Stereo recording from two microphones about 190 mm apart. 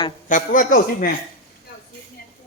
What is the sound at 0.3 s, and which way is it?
Speech, 45° left (ahead or behind).